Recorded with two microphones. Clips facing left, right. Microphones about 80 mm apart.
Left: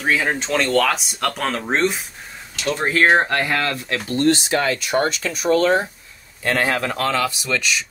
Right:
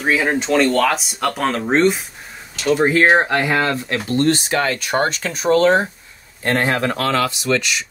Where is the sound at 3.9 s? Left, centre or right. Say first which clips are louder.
Right 1 dB; right.